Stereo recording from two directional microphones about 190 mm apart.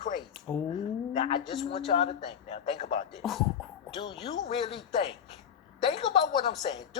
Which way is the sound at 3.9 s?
25° left (ahead or behind).